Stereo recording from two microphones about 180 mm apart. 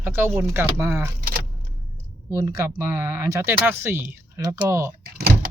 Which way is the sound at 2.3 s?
15° right (ahead or behind).